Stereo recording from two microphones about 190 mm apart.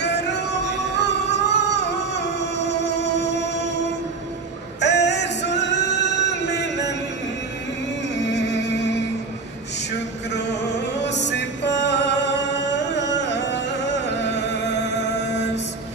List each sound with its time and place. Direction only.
0.0 s music: 65° left (ahead or behind)
4.7 s music: 65° left (ahead or behind)
8.3 s music: 65° left (ahead or behind)
10.3 s music: 60° left (ahead or behind)